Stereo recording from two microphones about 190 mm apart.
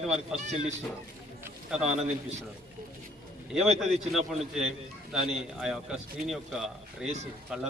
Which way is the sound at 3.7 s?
Centre (ahead or behind).